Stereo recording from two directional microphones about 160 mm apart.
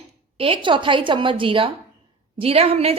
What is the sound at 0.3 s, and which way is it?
A woman's voice, 35° right (ahead or behind).